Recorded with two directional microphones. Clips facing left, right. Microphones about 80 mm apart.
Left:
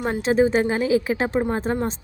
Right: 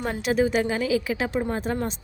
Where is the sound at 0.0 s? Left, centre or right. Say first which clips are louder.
Left 4 dB; left.